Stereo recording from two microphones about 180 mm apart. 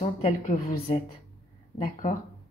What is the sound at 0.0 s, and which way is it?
Speech, 35° left (ahead or behind).